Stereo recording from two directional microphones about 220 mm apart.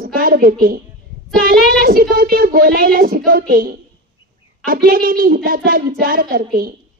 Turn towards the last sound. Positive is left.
turn(degrees=-40)  # may be behind; listen again after turning